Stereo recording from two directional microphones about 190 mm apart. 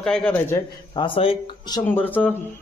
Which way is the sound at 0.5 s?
25° left (ahead or behind).